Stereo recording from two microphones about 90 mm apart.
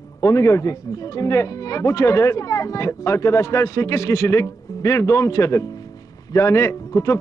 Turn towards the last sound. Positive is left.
turn(degrees=35)  # may be behind; listen again after turning